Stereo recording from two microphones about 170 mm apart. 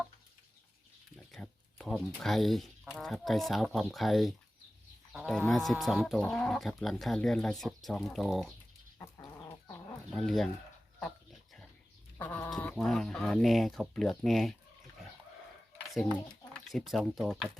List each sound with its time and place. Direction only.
1.1 s speech: 5° left (ahead or behind)
9.0 s chicken: 20° left (ahead or behind)
10.2 s speech: centre (ahead or behind)
11.0 s dog: centre (ahead or behind)
12.1 s chicken: 10° left (ahead or behind)
12.5 s speech: 5° left (ahead or behind)
16.5 s speech: 5° left (ahead or behind)